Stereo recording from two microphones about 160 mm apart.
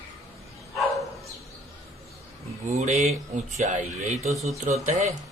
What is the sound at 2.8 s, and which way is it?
Speech, 45° right (ahead or behind).